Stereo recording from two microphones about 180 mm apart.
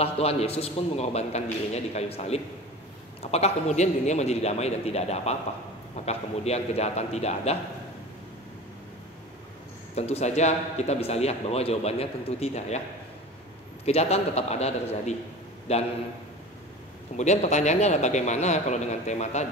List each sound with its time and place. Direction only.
0.0 s a man's voice: 35° left (ahead or behind)
9.9 s a man's voice: 35° left (ahead or behind)
13.8 s a man's voice: 35° left (ahead or behind)
17.2 s a man's voice: 40° left (ahead or behind)